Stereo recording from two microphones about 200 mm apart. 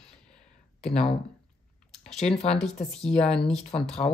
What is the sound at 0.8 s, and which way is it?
Speech, 5° left (ahead or behind).